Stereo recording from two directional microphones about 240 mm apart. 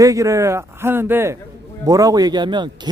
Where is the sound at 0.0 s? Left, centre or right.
Centre.